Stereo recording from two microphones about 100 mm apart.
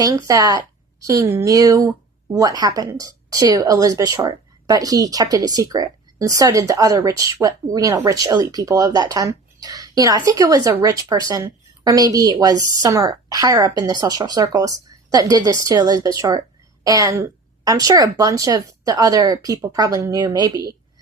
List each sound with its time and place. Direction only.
0.0 s a woman's voice: 35° right (ahead or behind)